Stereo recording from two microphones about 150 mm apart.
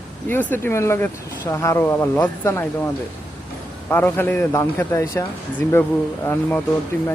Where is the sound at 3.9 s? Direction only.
15° left (ahead or behind).